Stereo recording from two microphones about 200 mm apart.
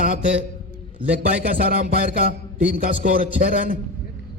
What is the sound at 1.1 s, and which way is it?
A man's voice, 45° right (ahead or behind).